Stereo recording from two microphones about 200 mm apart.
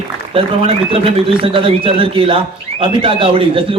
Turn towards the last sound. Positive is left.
turn(degrees=-25)  # may be behind; listen again after turning